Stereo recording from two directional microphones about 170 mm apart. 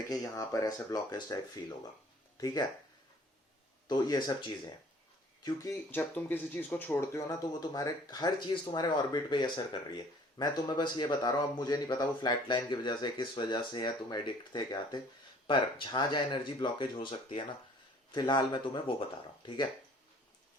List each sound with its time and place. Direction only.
0.3 s speech: 20° left (ahead or behind)
3.8 s speech: 25° left (ahead or behind)